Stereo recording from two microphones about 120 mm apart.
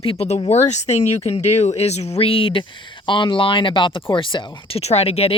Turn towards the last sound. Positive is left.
turn(degrees=55)  # may be behind; listen again after turning